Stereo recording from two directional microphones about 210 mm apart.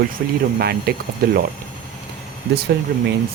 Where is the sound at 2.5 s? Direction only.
50° right (ahead or behind).